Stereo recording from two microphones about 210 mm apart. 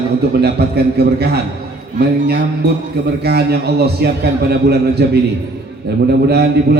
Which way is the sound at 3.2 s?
50° right (ahead or behind).